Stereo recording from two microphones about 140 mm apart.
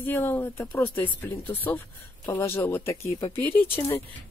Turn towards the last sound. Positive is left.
turn(degrees=15)  # may be behind; listen again after turning